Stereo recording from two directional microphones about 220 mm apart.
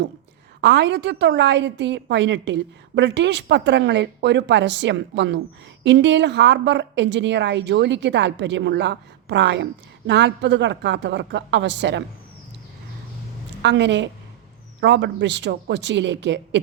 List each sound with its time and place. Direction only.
0.6 s a woman's voice: 50° right (ahead or behind)
13.6 s a woman's voice: 50° right (ahead or behind)